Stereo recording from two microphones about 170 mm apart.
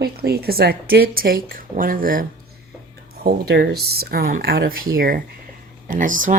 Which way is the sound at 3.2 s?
70° right (ahead or behind).